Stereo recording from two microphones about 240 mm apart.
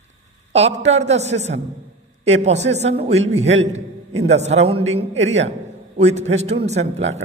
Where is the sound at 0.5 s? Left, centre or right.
Right.